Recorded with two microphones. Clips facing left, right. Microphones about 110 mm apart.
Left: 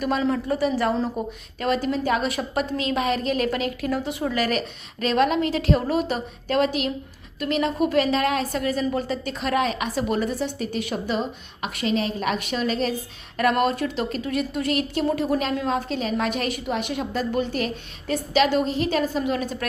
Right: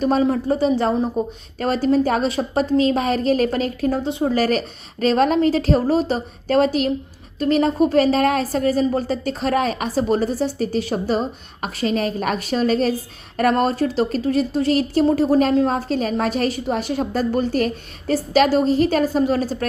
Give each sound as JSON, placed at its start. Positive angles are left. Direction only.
{"t": 0.0, "sound": "a woman's voice", "side_deg": -25}